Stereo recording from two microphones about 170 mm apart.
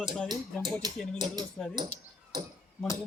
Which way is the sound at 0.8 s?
25° right (ahead or behind).